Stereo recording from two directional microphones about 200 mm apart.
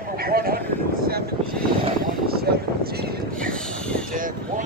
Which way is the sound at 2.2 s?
50° right (ahead or behind).